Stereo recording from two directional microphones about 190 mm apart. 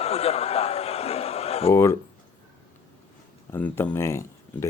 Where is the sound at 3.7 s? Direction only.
15° left (ahead or behind).